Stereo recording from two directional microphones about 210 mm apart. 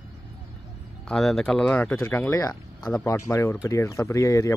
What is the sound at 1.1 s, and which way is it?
Speech, centre (ahead or behind).